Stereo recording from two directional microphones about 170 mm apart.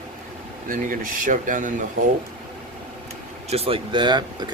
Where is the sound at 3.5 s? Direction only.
35° right (ahead or behind).